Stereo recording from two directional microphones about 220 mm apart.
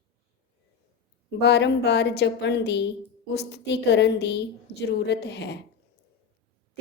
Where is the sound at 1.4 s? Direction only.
50° left (ahead or behind).